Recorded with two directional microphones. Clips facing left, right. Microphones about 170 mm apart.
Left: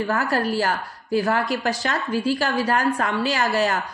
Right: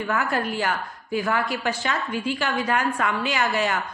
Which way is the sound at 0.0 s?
35° left (ahead or behind).